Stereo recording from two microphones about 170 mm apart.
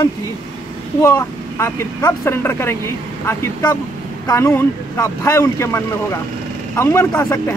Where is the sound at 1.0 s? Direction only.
15° left (ahead or behind).